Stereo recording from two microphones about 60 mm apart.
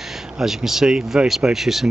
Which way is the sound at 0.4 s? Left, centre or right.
Centre.